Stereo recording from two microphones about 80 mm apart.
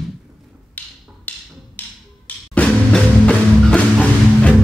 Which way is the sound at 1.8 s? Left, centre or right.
Left.